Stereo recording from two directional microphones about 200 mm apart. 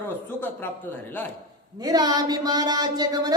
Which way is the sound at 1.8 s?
20° right (ahead or behind).